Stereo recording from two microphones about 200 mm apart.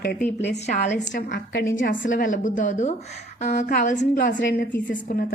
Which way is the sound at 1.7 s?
70° left (ahead or behind).